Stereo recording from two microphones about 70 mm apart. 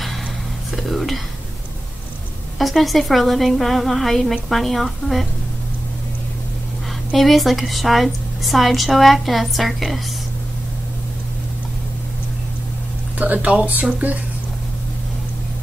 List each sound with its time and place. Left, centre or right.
0.7 s a sound: centre
2.6 s a woman's voice: centre
7.1 s a woman's voice: centre
13.2 s speech: right